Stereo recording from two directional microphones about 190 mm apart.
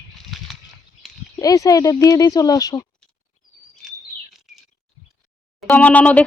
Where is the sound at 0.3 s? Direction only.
Centre (ahead or behind).